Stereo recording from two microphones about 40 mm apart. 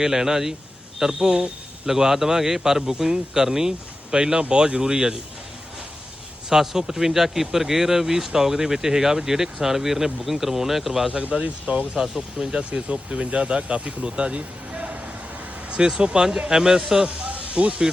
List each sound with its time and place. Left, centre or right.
0.0 s speech: centre
6.5 s speech: centre
11.1 s speech: right
11.9 s speech: centre
12.9 s speech: right
16.0 s speech: right
17.1 s snake: right